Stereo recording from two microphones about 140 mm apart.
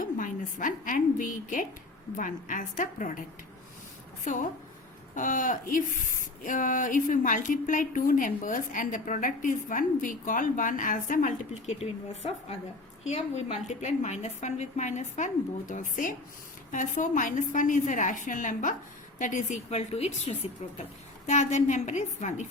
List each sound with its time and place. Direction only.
0.0 s a sound: 70° left (ahead or behind)
2.1 s speech: 70° left (ahead or behind)
5.1 s a woman's voice: 70° left (ahead or behind)